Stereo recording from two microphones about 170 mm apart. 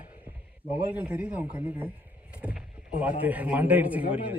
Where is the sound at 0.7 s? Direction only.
10° right (ahead or behind).